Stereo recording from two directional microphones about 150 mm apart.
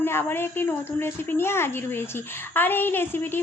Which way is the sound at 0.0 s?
15° left (ahead or behind).